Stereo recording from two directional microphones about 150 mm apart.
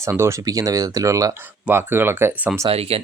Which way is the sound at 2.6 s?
40° right (ahead or behind).